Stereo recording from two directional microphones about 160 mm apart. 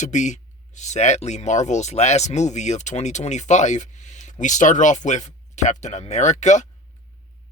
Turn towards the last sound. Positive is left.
turn(degrees=50)  # may be behind; listen again after turning